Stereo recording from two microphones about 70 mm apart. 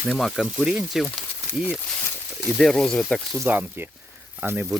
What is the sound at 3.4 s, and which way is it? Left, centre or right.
Speech, right.